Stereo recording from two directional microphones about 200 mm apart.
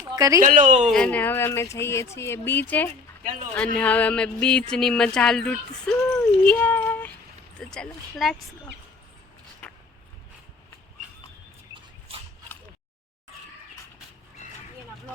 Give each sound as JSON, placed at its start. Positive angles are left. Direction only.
{"t": 0.1, "sound": "a woman's voice", "side_deg": -15}
{"t": 0.4, "sound": "a woman's voice", "side_deg": -40}
{"t": 0.9, "sound": "speech", "side_deg": 5}
{"t": 9.6, "sound": "a sound", "side_deg": 5}
{"t": 11.7, "sound": "dog", "side_deg": -30}